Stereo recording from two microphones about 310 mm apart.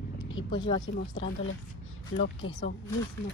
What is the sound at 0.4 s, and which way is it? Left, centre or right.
Speech, centre.